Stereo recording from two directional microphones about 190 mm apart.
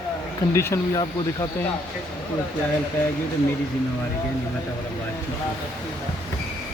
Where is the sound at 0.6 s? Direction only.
15° left (ahead or behind).